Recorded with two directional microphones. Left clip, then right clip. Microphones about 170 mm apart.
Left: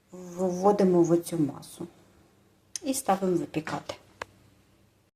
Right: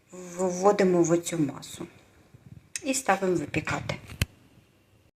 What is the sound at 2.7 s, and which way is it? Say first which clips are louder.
Speech: right 1 dB; 20° left (ahead or behind).